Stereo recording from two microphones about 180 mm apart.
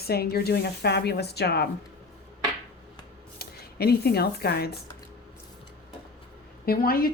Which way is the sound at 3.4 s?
60° left (ahead or behind).